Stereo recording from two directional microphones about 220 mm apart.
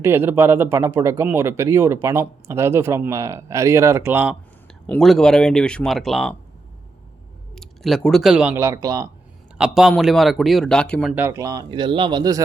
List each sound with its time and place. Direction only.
0.0 s speech: 10° right (ahead or behind)
4.7 s speech: 5° left (ahead or behind)
7.5 s speech: centre (ahead or behind); by 9.0 s 15° right (ahead or behind)
9.6 s speech: 5° right (ahead or behind)
11.1 s speech: 10° right (ahead or behind)